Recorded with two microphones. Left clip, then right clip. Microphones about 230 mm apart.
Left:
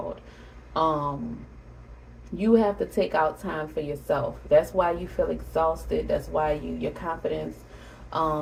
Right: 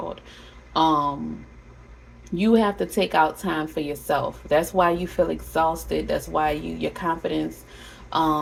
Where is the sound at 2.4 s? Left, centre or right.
Right.